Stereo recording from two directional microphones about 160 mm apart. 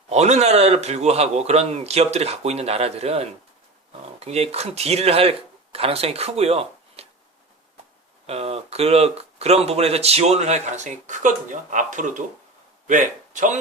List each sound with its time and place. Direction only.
0.1 s speech: 45° right (ahead or behind)
8.3 s speech: 40° right (ahead or behind)